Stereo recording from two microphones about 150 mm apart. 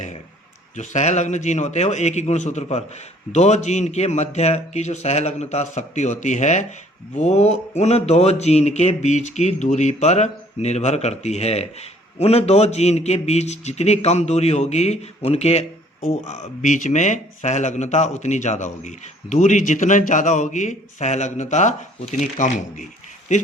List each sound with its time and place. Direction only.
0.8 s speech: 50° left (ahead or behind)